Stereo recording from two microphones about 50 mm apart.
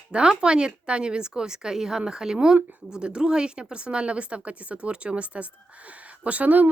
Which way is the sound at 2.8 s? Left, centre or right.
Centre.